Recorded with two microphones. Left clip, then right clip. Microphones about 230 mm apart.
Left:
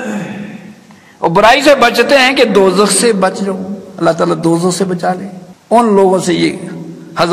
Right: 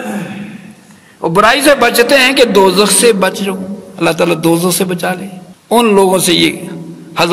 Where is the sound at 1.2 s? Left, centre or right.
Right.